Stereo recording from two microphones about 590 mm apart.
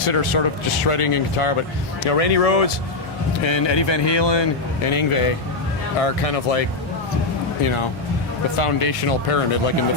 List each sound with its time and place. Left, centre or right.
0.0 s speech: left
2.0 s speech: left
3.4 s speech: left
6.0 s speech: left
7.6 s speech: left